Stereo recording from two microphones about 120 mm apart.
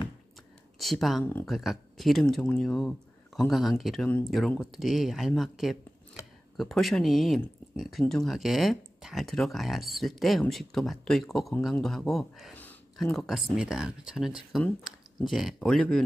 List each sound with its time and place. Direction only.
0.7 s speech: centre (ahead or behind)